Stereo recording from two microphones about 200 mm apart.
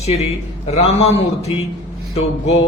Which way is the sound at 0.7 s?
30° left (ahead or behind).